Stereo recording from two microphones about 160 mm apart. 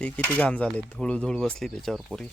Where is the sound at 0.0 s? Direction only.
10° left (ahead or behind).